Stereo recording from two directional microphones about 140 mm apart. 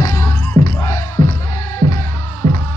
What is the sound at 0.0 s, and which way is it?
Music, 20° left (ahead or behind).